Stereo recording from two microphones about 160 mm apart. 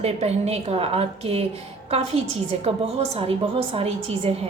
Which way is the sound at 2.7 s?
35° right (ahead or behind).